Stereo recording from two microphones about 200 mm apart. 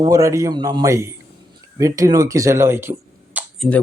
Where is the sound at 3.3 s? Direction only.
5° right (ahead or behind).